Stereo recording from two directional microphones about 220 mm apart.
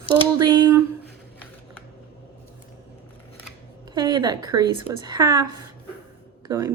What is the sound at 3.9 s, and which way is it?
A woman's voice, 20° right (ahead or behind).